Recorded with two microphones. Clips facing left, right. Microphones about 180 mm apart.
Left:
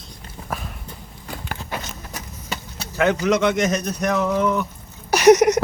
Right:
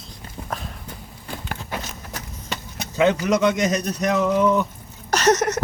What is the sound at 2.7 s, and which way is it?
Speech, 15° right (ahead or behind).